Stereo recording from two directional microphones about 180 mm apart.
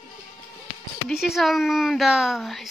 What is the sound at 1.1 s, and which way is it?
Speech, centre (ahead or behind).